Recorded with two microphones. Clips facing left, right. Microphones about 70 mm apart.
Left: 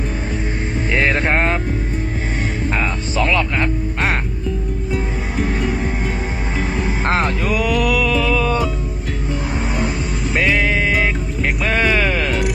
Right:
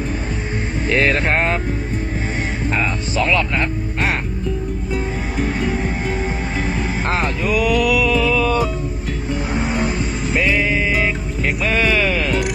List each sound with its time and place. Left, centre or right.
0.9 s music: left
2.7 s music: left
4.9 s music: centre
7.2 s music: left
10.3 s music: left